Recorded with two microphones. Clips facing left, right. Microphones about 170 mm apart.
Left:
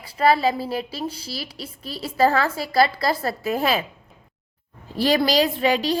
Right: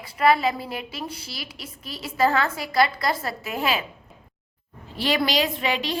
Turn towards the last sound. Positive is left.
turn(degrees=40)  # may be behind; listen again after turning